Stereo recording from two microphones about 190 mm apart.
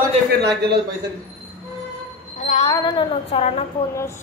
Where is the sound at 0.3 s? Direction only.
60° right (ahead or behind).